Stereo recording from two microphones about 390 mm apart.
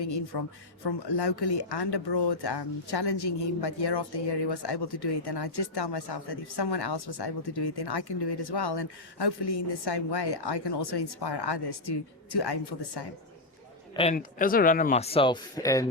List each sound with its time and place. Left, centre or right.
0.0 s speech: left
13.9 s speech: centre